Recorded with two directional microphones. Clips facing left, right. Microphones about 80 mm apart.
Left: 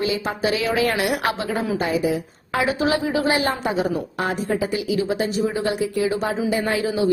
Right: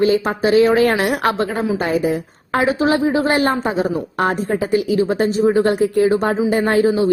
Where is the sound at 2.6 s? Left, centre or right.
Right.